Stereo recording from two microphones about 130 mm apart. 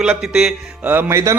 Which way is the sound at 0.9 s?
20° right (ahead or behind).